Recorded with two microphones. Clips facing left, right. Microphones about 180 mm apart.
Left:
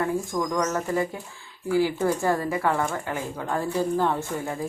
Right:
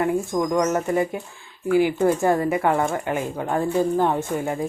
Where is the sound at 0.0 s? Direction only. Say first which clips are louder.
Right 4 dB; 20° right (ahead or behind).